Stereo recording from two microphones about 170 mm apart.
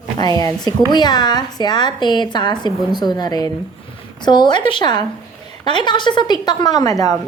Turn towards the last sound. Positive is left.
turn(degrees=20)  # may be behind; listen again after turning